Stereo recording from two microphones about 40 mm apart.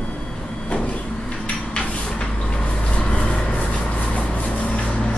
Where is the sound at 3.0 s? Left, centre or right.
Left.